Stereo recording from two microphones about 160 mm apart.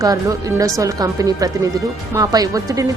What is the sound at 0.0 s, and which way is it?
A woman's voice, 20° right (ahead or behind).